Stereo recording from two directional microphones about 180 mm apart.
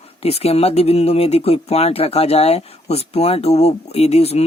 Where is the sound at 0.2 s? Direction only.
35° left (ahead or behind).